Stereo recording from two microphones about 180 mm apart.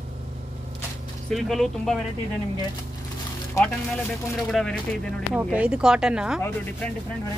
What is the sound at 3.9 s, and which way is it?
Speech, centre (ahead or behind).